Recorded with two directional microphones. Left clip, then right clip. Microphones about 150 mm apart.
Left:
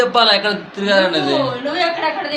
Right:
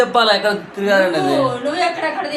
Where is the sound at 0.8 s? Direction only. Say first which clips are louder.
Left 1 dB; 25° right (ahead or behind).